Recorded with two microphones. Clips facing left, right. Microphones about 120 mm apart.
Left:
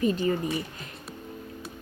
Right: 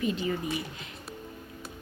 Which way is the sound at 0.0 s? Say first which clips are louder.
Left 5 dB; 40° left (ahead or behind).